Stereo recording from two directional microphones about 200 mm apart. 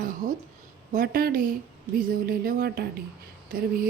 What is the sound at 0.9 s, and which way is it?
Speech, 45° right (ahead or behind).